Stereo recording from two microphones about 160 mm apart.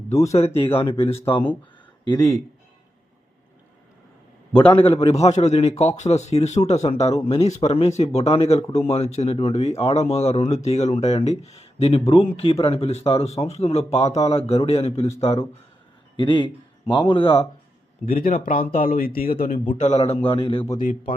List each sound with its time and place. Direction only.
0.1 s speech: 20° left (ahead or behind)
0.3 s speech: 40° left (ahead or behind)
4.5 s a man's voice: 10° left (ahead or behind)
4.9 s speech: 40° left (ahead or behind)
18.0 s speech: 60° left (ahead or behind)
19.6 s speech: 50° left (ahead or behind)